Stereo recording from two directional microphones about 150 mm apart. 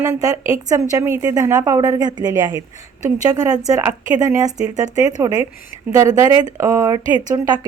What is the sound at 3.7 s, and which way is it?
A woman's voice, 20° right (ahead or behind).